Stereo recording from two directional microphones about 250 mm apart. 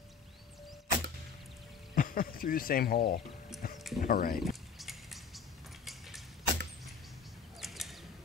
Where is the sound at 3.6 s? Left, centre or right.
Left.